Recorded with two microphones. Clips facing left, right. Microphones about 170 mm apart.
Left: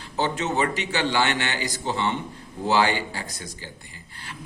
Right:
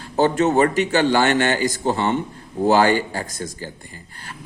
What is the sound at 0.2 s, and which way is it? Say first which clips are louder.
A man's voice: right 8 dB; 50° right (ahead or behind).